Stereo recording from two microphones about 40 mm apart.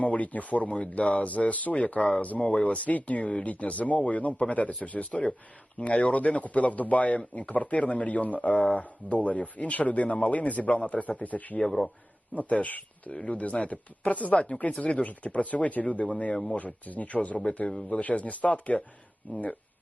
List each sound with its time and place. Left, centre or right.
0.0 s speech: left
11.6 s speech: centre
12.3 s speech: left
16.3 s speech: left
16.6 s speech: left